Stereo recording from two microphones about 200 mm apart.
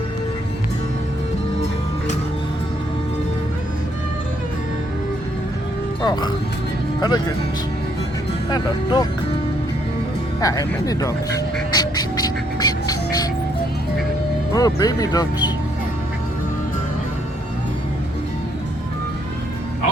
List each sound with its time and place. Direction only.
6.0 s speech: 20° left (ahead or behind)
8.4 s speech: 20° left (ahead or behind)
10.4 s speech: 15° left (ahead or behind)
11.7 s music: 20° left (ahead or behind)
14.5 s speech: 20° left (ahead or behind)